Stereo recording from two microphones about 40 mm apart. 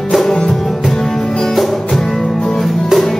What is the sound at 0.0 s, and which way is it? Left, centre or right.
Music, centre.